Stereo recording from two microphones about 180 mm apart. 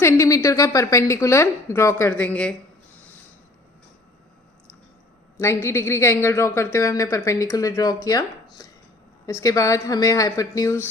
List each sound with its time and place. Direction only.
0.0 s a woman's voice: 20° left (ahead or behind)
5.4 s a woman's voice: 15° left (ahead or behind)